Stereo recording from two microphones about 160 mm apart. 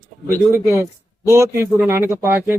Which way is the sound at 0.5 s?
15° right (ahead or behind).